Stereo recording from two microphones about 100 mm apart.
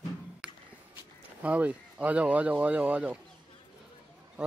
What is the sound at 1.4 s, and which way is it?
Speech, 15° right (ahead or behind).